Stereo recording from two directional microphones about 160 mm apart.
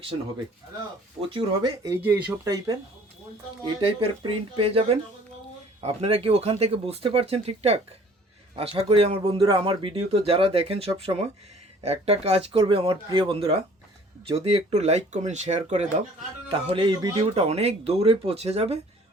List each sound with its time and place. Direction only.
1.3 s speech: 30° right (ahead or behind)
1.8 s speech: 10° right (ahead or behind)
3.8 s speech: 35° right (ahead or behind)
9.2 s speech: 25° right (ahead or behind); by 16.0 s 45° right (ahead or behind)
16.5 s speech: 35° right (ahead or behind)
17.3 s speech: 40° right (ahead or behind)